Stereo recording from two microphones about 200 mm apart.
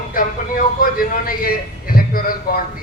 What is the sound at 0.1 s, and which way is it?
Speech, 45° left (ahead or behind).